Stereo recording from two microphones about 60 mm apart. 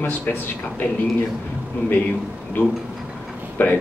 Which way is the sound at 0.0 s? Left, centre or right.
Left.